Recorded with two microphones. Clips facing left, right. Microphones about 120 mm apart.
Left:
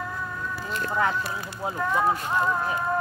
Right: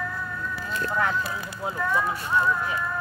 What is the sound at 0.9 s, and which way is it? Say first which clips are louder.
Speech: left 1 dB; 20° left (ahead or behind).